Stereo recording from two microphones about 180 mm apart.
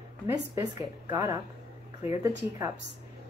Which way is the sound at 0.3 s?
20° right (ahead or behind).